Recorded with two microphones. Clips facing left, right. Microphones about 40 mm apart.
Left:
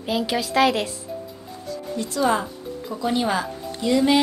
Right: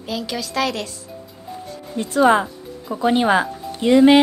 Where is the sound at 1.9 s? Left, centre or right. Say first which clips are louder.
Right 7 dB; right.